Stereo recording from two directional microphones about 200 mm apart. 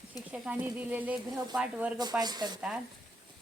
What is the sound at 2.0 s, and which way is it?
Speech, 20° right (ahead or behind).